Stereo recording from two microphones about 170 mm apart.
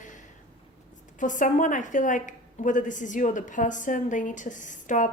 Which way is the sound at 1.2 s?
50° left (ahead or behind).